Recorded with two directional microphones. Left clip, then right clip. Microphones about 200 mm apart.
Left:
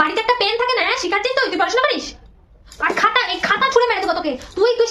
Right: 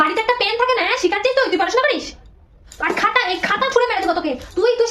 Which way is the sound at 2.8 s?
15° left (ahead or behind).